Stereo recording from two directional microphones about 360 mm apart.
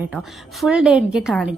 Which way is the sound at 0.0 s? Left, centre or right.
Centre.